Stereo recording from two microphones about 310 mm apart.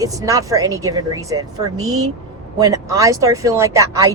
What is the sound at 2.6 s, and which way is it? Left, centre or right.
Speech, centre.